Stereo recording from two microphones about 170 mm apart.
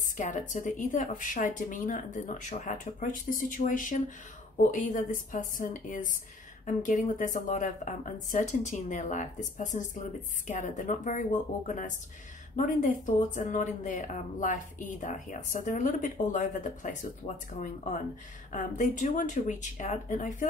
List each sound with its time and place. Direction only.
0.2 s speech: 45° left (ahead or behind)